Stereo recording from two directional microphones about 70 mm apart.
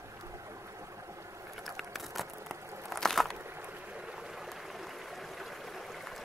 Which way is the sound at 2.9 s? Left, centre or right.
Centre.